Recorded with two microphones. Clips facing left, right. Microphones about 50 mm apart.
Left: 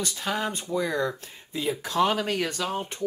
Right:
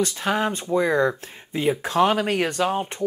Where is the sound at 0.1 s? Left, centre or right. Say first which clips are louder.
Right 6 dB; right.